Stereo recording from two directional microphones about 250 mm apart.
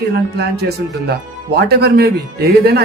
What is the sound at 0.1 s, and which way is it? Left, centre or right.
A man's voice, right.